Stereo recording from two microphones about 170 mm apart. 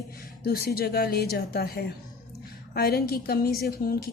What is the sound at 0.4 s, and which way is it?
A woman's voice, 65° left (ahead or behind).